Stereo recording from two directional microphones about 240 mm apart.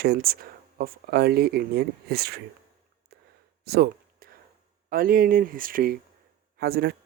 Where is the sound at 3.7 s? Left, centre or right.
Right.